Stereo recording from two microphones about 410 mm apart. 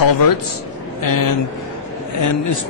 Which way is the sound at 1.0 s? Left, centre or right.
Left.